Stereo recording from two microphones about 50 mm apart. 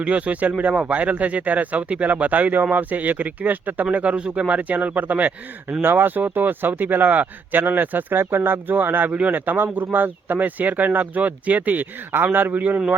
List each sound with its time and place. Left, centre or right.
0.0 s speech: right
3.9 s speech: right
5.8 s speech: right